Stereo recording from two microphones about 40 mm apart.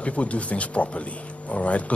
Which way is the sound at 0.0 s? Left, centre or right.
Left.